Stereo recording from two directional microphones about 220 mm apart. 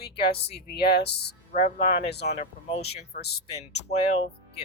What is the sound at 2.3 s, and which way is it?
Speech, 35° left (ahead or behind).